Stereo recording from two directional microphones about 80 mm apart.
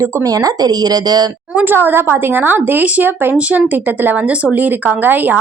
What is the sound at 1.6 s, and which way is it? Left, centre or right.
Speech, right.